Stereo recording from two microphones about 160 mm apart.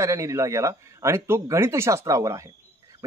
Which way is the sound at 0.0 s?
20° right (ahead or behind).